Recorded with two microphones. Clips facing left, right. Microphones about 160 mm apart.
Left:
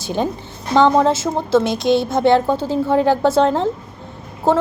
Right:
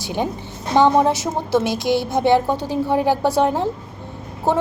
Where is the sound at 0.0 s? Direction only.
15° right (ahead or behind).